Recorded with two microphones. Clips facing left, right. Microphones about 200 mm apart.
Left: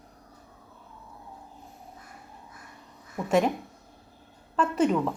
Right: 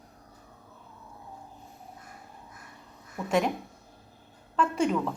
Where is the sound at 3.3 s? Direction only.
5° left (ahead or behind).